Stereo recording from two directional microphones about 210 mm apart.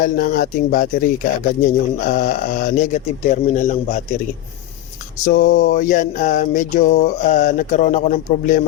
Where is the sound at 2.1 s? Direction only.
40° left (ahead or behind).